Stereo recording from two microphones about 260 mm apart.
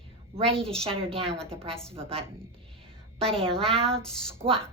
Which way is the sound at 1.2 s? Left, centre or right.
Centre.